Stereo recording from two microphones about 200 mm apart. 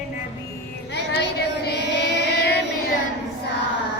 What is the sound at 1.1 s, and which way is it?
Child singing, 55° left (ahead or behind).